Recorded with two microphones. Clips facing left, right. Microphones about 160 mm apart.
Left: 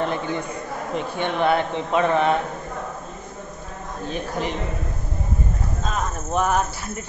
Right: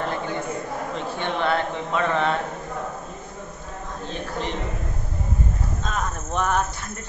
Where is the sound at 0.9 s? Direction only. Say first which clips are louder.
Left 5 dB; 15° left (ahead or behind).